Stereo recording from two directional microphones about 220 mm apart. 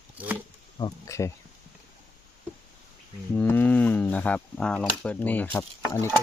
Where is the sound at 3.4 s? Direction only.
10° left (ahead or behind).